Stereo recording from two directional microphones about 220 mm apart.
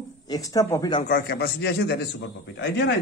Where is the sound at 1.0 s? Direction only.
40° left (ahead or behind).